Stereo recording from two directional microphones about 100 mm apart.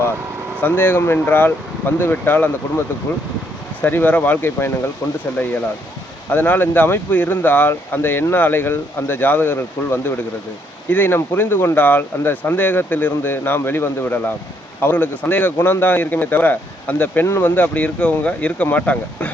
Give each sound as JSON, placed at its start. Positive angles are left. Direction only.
{"t": 0.6, "sound": "speech", "side_deg": 20}
{"t": 6.3, "sound": "speech", "side_deg": 20}